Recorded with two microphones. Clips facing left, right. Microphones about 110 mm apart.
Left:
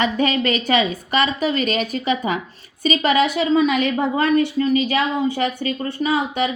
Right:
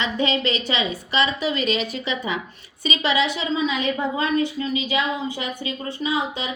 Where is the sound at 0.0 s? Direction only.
50° left (ahead or behind).